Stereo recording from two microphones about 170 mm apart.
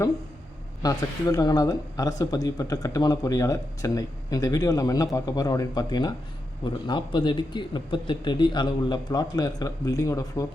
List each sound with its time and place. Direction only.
0.8 s speech: 20° left (ahead or behind)